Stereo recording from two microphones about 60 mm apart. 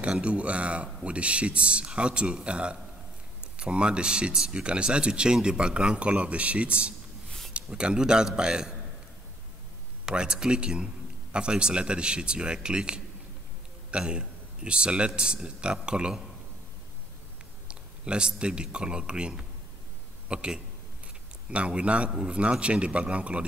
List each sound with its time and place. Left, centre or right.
0.0 s speech: centre
10.0 s speech: centre
17.6 s speech: centre